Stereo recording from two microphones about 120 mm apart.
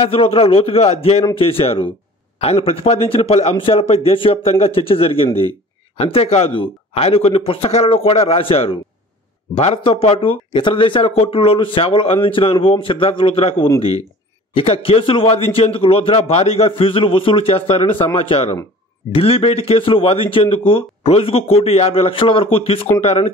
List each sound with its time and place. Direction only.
0.0 s a man's voice: 55° left (ahead or behind)
10.2 s a man's voice: 45° left (ahead or behind)